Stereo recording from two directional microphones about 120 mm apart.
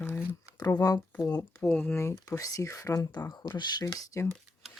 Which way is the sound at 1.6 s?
15° left (ahead or behind).